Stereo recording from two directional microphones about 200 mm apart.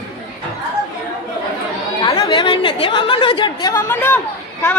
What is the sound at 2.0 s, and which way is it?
A woman's voice, 25° left (ahead or behind).